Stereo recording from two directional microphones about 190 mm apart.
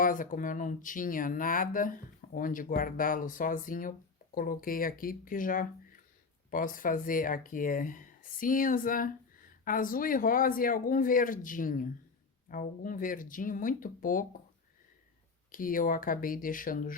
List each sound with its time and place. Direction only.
0.0 s speech: 45° left (ahead or behind)
15.5 s speech: 45° left (ahead or behind)